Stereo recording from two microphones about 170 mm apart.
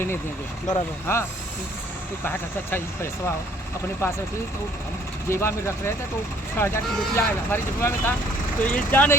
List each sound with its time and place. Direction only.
0.7 s speech: 15° left (ahead or behind)
2.2 s speech: 15° left (ahead or behind)
5.3 s speech: 15° left (ahead or behind)